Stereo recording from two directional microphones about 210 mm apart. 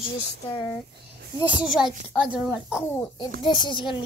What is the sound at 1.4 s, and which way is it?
A child's voice, 5° right (ahead or behind).